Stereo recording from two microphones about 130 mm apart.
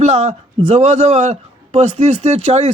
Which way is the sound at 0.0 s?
60° right (ahead or behind).